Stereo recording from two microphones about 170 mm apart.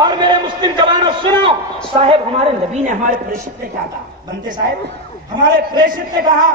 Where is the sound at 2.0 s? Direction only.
35° right (ahead or behind); by 3.3 s 50° right (ahead or behind).